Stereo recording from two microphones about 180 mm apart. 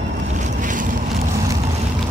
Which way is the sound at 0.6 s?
45° right (ahead or behind).